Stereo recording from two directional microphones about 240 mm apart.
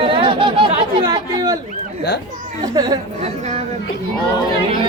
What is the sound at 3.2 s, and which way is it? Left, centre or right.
Chatter, right.